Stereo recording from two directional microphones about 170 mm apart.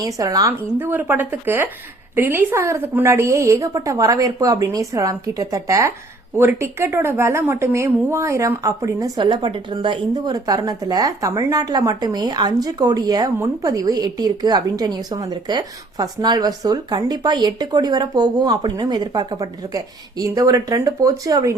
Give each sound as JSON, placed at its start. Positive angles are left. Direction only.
{"t": 0.0, "sound": "a woman's voice", "side_deg": -20}